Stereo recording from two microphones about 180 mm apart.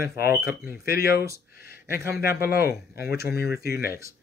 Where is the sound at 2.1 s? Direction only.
60° left (ahead or behind).